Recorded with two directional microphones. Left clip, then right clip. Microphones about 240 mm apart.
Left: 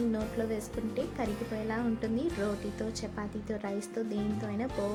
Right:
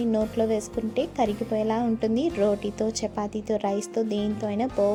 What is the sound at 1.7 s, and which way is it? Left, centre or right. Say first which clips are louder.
A woman's voice: right 8 dB; right.